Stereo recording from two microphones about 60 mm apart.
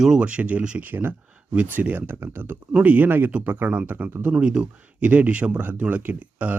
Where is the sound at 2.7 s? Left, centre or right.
Right.